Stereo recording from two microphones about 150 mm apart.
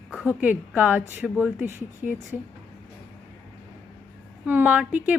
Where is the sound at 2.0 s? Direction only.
55° left (ahead or behind).